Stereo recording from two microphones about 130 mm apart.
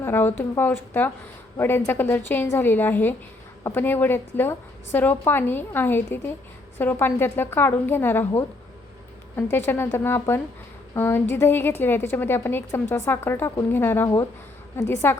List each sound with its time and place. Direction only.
0.0 s a woman's voice: 15° left (ahead or behind)
9.3 s a woman's voice: 15° left (ahead or behind)